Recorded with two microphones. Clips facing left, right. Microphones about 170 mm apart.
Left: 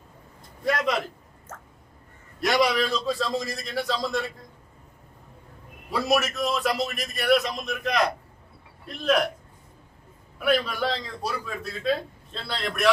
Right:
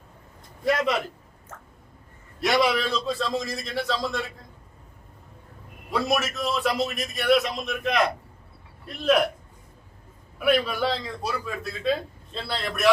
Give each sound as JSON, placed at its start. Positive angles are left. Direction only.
{"t": 0.6, "sound": "a sound", "side_deg": -5}
{"t": 2.4, "sound": "a man's voice", "side_deg": 0}
{"t": 5.9, "sound": "a man's voice", "side_deg": 0}
{"t": 10.4, "sound": "a man's voice", "side_deg": -5}